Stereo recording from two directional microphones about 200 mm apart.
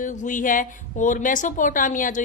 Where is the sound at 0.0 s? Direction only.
40° left (ahead or behind).